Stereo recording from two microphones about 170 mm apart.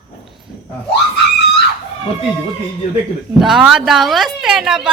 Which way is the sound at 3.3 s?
Centre (ahead or behind).